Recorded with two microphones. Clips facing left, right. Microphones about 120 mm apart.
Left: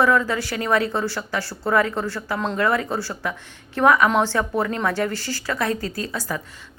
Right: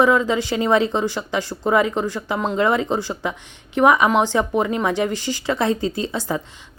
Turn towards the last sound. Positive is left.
turn(degrees=-25)  # may be behind; listen again after turning